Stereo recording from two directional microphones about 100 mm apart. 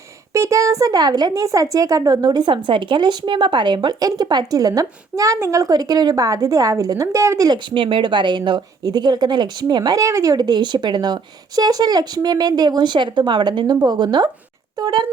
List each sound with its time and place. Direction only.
0.3 s speech: 30° right (ahead or behind)